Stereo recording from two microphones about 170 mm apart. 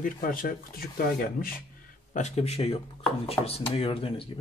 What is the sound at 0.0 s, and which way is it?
Speech, 55° left (ahead or behind).